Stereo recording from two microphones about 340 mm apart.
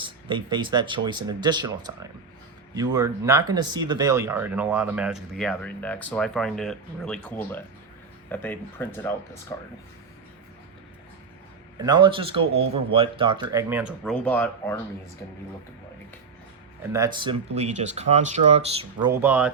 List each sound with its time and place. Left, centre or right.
0.0 s speech: centre
11.8 s speech: centre
16.9 s speech: centre